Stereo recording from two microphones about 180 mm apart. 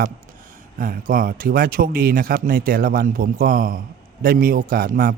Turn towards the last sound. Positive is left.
turn(degrees=-50)  # may be behind; listen again after turning